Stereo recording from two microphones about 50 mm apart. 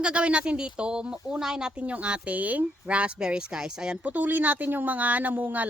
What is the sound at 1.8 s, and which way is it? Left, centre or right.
Speech, right.